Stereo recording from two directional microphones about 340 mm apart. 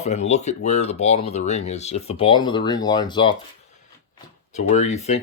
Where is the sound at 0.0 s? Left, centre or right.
Centre.